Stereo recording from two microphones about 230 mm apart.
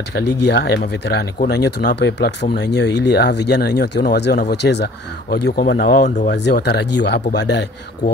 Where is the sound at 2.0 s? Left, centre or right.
Left.